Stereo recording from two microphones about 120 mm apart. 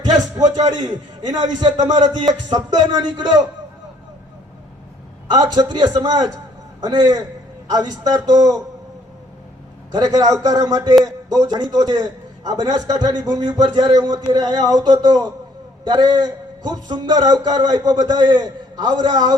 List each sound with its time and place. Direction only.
0.6 s a man's voice: 35° right (ahead or behind)
5.3 s a man's voice: 35° right (ahead or behind)
9.9 s a man's voice: 35° right (ahead or behind)